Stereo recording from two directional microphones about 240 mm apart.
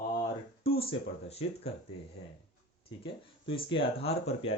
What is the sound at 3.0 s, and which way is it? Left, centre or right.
Speech, left.